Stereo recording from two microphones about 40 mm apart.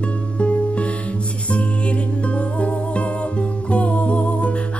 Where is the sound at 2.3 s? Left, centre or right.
Left.